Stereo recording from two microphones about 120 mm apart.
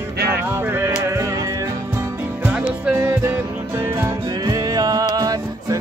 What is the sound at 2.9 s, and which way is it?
Music, 20° right (ahead or behind).